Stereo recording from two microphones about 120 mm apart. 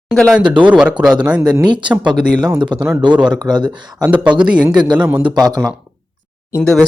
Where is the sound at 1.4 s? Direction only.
30° right (ahead or behind).